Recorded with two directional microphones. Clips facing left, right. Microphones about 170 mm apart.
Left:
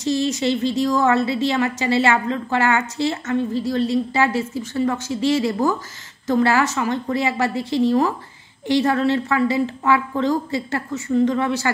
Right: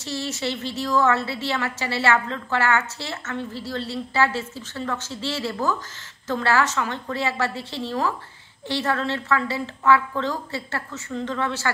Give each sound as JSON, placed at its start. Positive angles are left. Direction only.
{"t": 0.0, "sound": "a woman's voice", "side_deg": 15}